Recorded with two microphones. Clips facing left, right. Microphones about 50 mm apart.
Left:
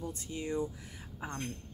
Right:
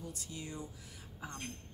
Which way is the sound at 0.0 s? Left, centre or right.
Left.